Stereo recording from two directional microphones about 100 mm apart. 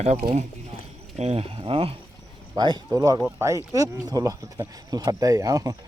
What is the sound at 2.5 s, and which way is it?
Speech, 45° right (ahead or behind).